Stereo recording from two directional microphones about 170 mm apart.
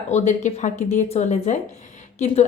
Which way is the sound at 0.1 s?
45° left (ahead or behind).